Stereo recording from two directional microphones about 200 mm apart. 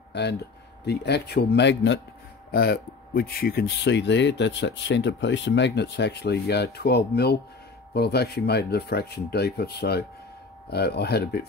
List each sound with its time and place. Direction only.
0.1 s speech: 60° left (ahead or behind)